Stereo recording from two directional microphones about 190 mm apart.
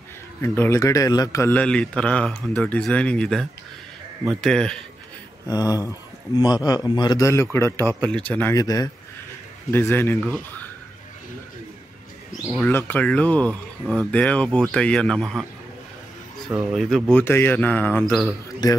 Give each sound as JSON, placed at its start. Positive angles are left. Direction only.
{"t": 0.4, "sound": "a man's voice", "side_deg": 15}
{"t": 5.5, "sound": "a man's voice", "side_deg": 20}
{"t": 12.6, "sound": "speech", "side_deg": 10}
{"t": 16.4, "sound": "speech", "side_deg": 0}
{"t": 17.2, "sound": "a man's voice", "side_deg": 10}
{"t": 18.6, "sound": "a man's voice", "side_deg": 20}